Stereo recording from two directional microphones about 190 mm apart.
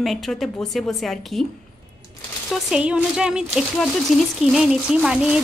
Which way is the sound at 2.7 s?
5° right (ahead or behind).